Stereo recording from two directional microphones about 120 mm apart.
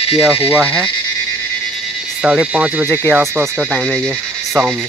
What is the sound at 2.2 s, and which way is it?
Speech, 10° right (ahead or behind).